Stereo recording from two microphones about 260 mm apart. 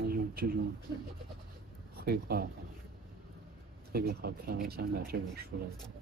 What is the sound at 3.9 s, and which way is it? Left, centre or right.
Speech, right.